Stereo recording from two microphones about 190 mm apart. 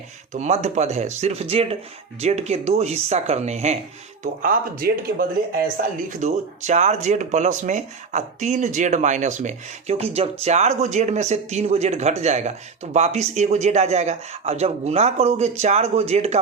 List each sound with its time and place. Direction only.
0.3 s speech: 35° right (ahead or behind)
4.2 s speech: 50° right (ahead or behind)